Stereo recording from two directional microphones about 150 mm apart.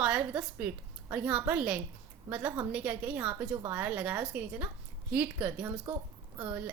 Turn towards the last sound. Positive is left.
turn(degrees=-10)  # may be behind; listen again after turning